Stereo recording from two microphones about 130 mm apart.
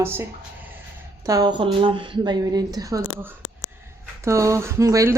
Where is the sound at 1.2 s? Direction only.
25° right (ahead or behind).